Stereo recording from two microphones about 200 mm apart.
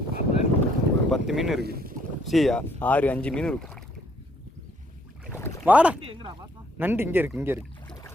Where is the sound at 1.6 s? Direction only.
50° right (ahead or behind).